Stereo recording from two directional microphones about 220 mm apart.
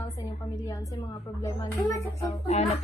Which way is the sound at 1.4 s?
15° left (ahead or behind).